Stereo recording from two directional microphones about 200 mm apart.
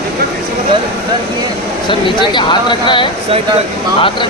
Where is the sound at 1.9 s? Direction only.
25° left (ahead or behind).